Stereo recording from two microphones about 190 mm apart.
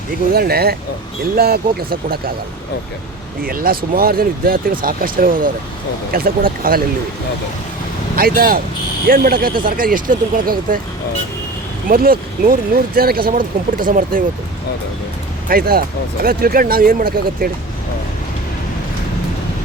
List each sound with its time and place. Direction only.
0.3 s speech: 55° right (ahead or behind)
3.4 s speech: 50° right (ahead or behind)
8.1 s speech: 50° right (ahead or behind)
11.9 s speech: 50° right (ahead or behind)
15.4 s speech: 50° right (ahead or behind)